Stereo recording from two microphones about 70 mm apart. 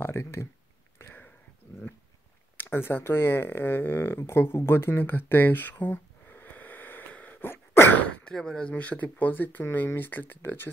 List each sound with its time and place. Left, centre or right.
0.0 s speech: left
0.9 s a sound: left
2.5 s speech: left